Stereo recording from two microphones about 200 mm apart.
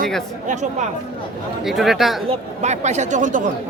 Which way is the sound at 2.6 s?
35° right (ahead or behind).